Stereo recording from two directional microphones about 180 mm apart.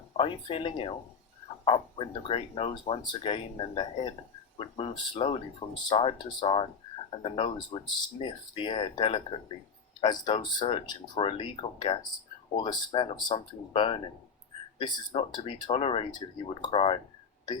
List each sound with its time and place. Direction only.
0.2 s speech: 30° left (ahead or behind)